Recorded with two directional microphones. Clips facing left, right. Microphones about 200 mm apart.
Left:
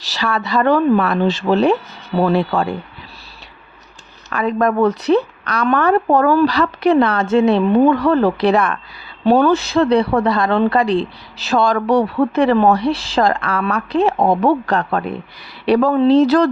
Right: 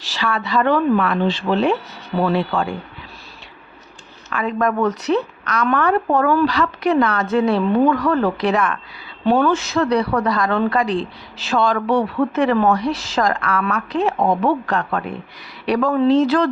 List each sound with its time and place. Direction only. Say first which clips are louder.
0.0 s a woman's voice: left 2 dB; 40° left (ahead or behind)
4.3 s a woman's voice: left 3 dB; 40° left (ahead or behind)